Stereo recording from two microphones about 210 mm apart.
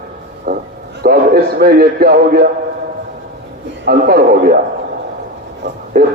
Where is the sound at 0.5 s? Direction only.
45° right (ahead or behind).